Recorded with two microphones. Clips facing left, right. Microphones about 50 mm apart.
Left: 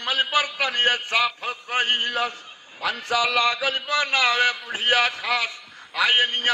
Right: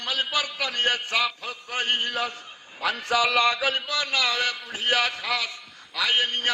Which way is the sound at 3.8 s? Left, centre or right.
Left.